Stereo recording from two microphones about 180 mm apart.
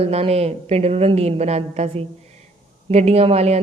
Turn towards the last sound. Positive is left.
turn(degrees=-35)  # may be behind; listen again after turning